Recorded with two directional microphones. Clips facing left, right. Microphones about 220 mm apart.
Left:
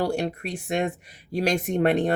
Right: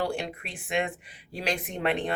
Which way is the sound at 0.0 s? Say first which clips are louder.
Left 5 dB; 40° left (ahead or behind).